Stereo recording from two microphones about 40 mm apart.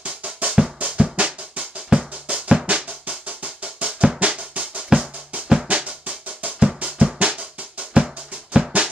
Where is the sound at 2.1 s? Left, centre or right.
Right.